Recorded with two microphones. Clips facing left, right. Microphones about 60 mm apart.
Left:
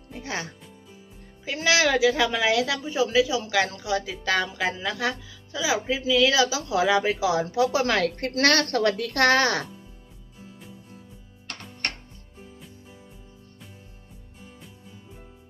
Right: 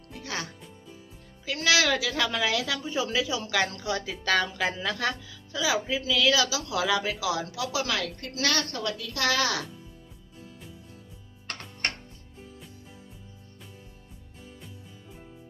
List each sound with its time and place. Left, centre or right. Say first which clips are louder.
0.1 s music: left 3 dB; left
1.5 s a woman's voice: left 2 dB; left